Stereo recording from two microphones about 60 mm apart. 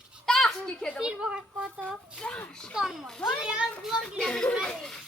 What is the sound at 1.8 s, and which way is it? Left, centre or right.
Speech, centre.